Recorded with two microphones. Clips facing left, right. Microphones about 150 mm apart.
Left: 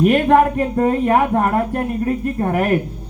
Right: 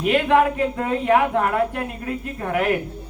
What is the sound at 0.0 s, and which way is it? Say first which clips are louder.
Speech: left 4 dB; 45° left (ahead or behind).